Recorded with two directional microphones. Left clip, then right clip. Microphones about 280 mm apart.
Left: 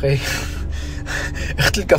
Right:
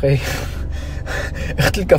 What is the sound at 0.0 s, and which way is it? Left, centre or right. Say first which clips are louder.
Speech: right 1 dB; centre.